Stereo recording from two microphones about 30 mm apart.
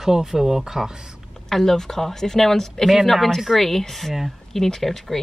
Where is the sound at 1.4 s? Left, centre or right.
Centre.